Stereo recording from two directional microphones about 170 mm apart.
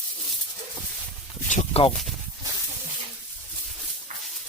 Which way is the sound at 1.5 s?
45° left (ahead or behind).